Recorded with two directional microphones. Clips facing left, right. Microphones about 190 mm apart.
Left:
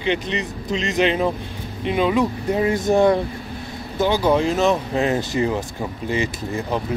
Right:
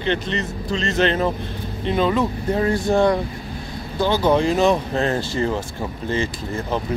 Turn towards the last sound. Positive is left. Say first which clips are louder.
# left 1 dB
turn(degrees=15)  # may be behind; listen again after turning